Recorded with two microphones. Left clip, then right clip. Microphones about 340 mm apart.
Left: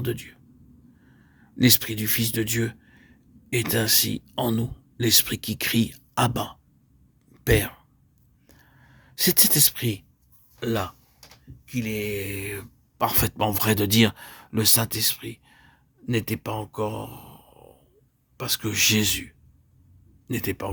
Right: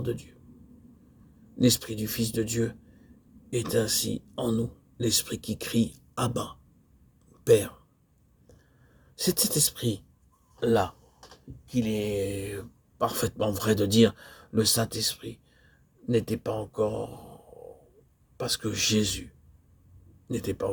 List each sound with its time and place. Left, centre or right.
0.0 s speech: left
1.5 s speech: left
9.1 s speech: left
18.3 s speech: left